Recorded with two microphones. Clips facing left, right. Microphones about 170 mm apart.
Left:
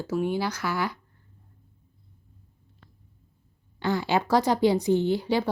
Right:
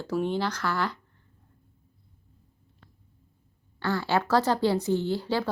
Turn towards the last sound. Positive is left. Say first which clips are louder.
# left 3 dB
turn(degrees=15)  # may be behind; listen again after turning